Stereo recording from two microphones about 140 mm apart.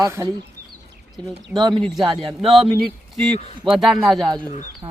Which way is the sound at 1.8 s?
Centre (ahead or behind).